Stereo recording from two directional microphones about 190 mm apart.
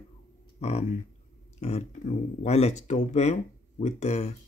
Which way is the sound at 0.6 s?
35° left (ahead or behind).